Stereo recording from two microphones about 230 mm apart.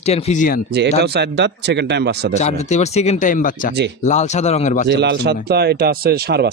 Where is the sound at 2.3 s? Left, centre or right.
Left.